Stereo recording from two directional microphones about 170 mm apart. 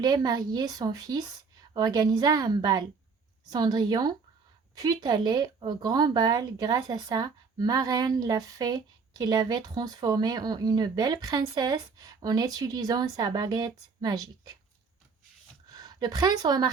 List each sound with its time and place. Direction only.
0.0 s speech: 20° right (ahead or behind)
15.7 s a woman's voice: 25° right (ahead or behind)